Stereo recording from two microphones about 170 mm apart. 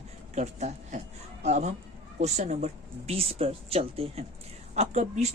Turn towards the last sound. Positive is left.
turn(degrees=-40)  # may be behind; listen again after turning